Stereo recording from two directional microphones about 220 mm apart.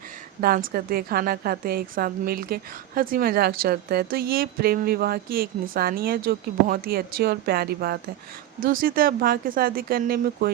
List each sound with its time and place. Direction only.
0.4 s a woman's voice: 40° right (ahead or behind)